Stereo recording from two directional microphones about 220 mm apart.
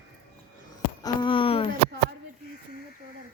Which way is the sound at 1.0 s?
20° left (ahead or behind).